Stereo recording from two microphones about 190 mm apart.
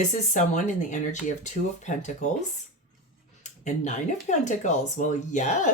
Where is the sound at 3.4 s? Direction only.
40° left (ahead or behind).